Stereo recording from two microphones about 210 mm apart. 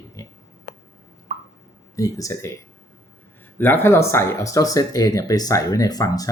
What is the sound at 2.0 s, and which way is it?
Speech, 15° left (ahead or behind).